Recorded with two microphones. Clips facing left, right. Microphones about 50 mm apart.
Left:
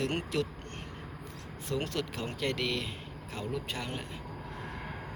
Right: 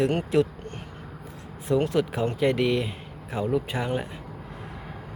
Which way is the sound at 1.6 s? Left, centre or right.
Centre.